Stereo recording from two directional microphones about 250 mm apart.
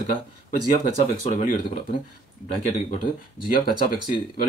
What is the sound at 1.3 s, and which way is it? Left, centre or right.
Speech, left.